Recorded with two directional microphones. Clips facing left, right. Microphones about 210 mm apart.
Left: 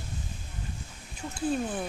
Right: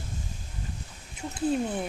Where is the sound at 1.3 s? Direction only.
20° right (ahead or behind).